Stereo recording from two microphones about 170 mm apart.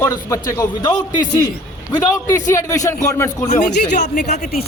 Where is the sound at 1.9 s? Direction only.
20° left (ahead or behind).